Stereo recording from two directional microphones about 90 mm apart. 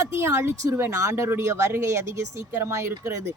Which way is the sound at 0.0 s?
30° right (ahead or behind).